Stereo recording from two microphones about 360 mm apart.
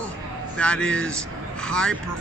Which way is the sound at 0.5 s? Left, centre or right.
Centre.